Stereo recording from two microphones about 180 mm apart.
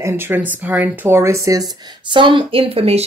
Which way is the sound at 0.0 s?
10° right (ahead or behind).